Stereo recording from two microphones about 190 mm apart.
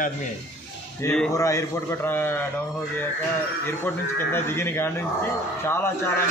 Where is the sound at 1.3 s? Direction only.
15° left (ahead or behind).